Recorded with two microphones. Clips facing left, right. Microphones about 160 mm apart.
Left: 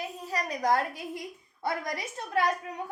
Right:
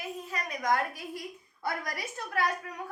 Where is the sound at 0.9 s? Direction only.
20° left (ahead or behind).